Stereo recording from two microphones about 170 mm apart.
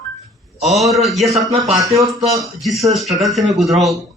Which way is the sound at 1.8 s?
20° right (ahead or behind).